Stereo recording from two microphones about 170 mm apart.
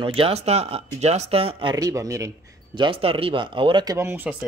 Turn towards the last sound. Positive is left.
turn(degrees=-15)  # may be behind; listen again after turning